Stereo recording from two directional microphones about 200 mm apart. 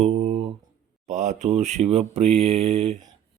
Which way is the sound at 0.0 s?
30° right (ahead or behind).